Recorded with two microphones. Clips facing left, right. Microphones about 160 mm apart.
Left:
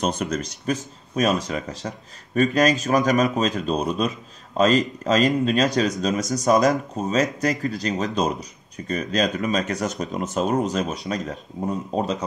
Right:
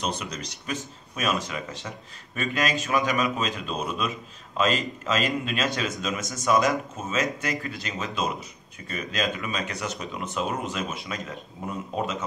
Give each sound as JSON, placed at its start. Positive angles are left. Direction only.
{"t": 0.0, "sound": "speech", "side_deg": 45}